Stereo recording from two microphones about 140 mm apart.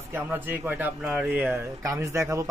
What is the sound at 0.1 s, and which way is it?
Speech, 15° right (ahead or behind).